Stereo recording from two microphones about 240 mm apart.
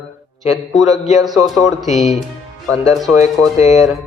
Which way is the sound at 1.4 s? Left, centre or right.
Centre.